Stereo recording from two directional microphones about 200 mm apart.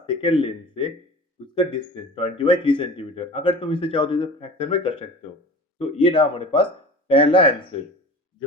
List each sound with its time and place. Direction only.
0.0 s speech: 25° left (ahead or behind)